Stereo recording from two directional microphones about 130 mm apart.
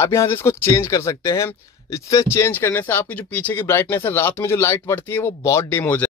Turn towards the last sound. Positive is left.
turn(degrees=15)  # may be behind; listen again after turning